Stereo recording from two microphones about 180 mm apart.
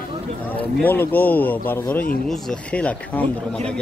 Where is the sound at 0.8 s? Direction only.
10° left (ahead or behind).